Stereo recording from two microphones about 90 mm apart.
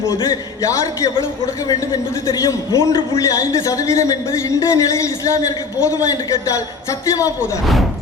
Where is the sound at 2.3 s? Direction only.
40° left (ahead or behind).